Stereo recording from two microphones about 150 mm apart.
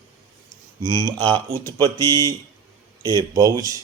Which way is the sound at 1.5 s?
25° right (ahead or behind).